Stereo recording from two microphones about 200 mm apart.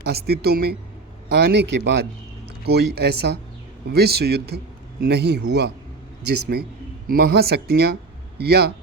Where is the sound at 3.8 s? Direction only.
55° right (ahead or behind).